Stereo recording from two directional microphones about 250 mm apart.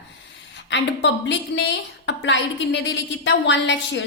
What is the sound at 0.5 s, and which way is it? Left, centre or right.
A woman's voice, left.